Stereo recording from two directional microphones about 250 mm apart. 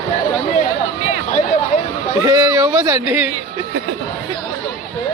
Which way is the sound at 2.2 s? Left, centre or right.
Centre.